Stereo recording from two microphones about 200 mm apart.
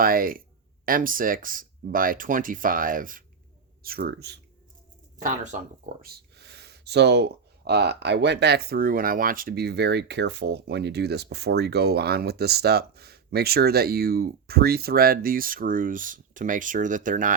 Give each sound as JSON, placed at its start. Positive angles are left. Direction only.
{"t": 0.0, "sound": "speech", "side_deg": -45}
{"t": 5.2, "sound": "speech", "side_deg": -35}
{"t": 6.1, "sound": "speech", "side_deg": -55}